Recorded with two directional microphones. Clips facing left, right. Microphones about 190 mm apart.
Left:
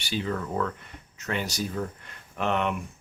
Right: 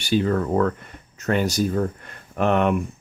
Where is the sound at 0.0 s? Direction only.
50° right (ahead or behind).